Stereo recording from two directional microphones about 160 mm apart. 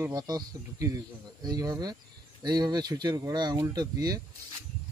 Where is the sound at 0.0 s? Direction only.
20° right (ahead or behind).